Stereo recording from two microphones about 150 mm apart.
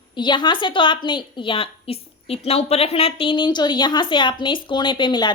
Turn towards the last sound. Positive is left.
turn(degrees=30)  # may be behind; listen again after turning